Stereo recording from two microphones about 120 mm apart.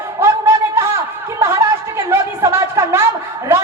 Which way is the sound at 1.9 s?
25° right (ahead or behind).